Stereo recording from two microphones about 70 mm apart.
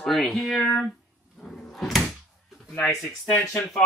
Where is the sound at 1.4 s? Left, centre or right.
Centre.